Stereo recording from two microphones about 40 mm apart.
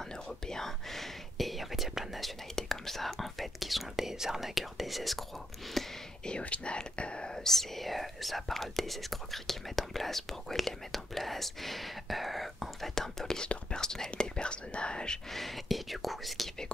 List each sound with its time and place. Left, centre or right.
0.5 s whispering: centre
6.4 s speech: left
7.3 s speech: centre
12.9 s whispering: centre
13.4 s whispering: left
15.3 s whispering: centre